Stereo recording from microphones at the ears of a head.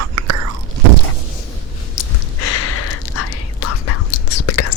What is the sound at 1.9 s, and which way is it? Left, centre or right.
Whispering, left.